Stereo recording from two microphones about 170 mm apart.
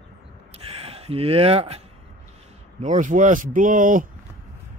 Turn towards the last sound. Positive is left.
turn(degrees=-50)  # may be behind; listen again after turning